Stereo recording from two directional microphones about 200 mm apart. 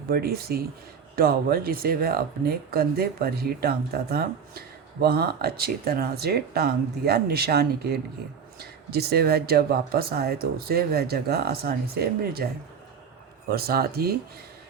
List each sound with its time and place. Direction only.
0.1 s speech: 50° right (ahead or behind)
13.5 s speech: 50° right (ahead or behind)